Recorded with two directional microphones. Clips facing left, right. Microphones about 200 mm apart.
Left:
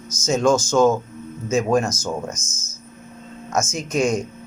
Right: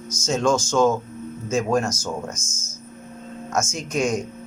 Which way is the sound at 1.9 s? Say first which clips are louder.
Left 2 dB; 10° right (ahead or behind).